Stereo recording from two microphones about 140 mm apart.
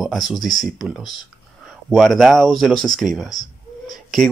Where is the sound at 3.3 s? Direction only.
25° left (ahead or behind).